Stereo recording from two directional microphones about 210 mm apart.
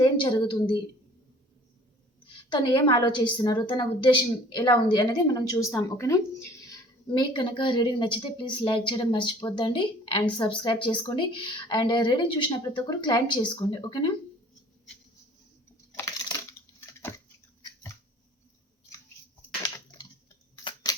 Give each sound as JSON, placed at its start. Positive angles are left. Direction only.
{"t": 0.0, "sound": "a woman's voice", "side_deg": 20}
{"t": 2.5, "sound": "a woman's voice", "side_deg": 20}
{"t": 16.5, "sound": "coin", "side_deg": 15}
{"t": 20.9, "sound": "a sound", "side_deg": 20}